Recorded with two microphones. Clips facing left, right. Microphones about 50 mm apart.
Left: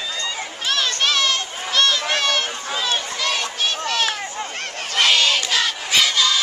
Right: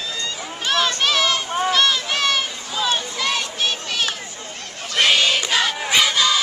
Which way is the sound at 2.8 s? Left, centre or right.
Centre.